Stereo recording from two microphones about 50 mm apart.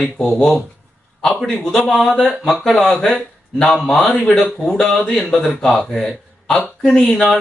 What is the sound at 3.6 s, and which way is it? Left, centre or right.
Speech, centre.